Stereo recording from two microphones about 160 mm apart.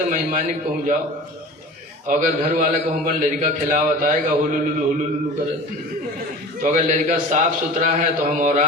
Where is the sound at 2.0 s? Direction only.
55° right (ahead or behind).